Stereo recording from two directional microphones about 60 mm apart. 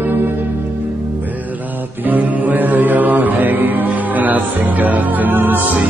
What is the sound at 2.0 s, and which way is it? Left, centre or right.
Mantra, right.